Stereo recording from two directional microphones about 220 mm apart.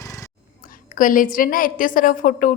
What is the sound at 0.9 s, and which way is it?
A woman's voice, 40° left (ahead or behind).